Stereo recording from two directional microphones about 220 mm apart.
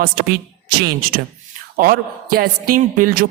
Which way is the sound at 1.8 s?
40° right (ahead or behind).